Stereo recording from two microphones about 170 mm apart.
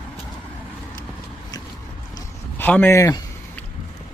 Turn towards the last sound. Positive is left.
turn(degrees=15)  # may be behind; listen again after turning